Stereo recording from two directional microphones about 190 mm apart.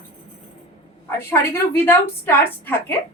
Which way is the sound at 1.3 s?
10° left (ahead or behind).